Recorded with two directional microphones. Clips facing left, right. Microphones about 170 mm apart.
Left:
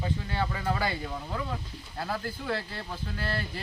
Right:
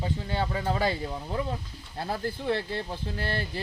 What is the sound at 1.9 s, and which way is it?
Speech, 30° right (ahead or behind).